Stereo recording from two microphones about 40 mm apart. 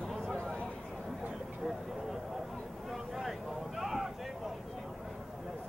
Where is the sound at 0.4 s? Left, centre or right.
Left.